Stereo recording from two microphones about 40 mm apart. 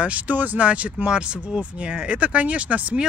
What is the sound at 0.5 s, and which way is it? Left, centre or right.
Speech, right.